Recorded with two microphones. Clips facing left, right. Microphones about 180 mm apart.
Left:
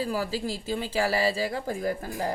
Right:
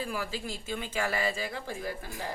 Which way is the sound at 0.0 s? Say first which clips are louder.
Left 6 dB; 35° left (ahead or behind).